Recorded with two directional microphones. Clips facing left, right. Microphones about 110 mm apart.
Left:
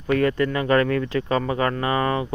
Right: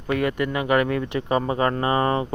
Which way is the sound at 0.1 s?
15° right (ahead or behind).